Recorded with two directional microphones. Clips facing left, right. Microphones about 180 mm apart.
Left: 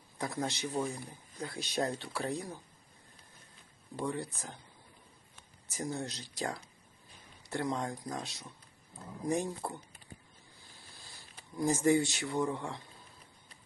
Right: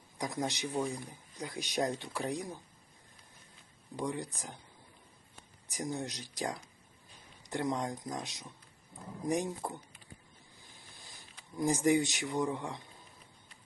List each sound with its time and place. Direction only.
0.2 s speech: 15° right (ahead or behind)
3.9 s speech: 15° right (ahead or behind)
5.6 s speech: 15° right (ahead or behind)
10.6 s a sound: 15° right (ahead or behind)